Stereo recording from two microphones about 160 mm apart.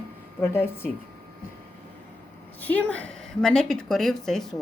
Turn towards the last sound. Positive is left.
turn(degrees=0)  # may be behind; listen again after turning